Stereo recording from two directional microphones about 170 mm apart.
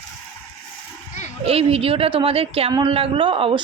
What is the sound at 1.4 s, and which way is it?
A man's voice, 35° right (ahead or behind).